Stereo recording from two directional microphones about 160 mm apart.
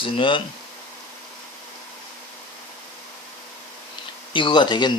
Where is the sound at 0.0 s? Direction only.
30° left (ahead or behind).